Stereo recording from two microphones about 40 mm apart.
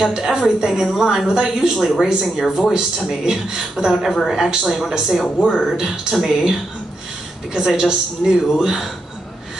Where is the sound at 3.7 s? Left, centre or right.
Centre.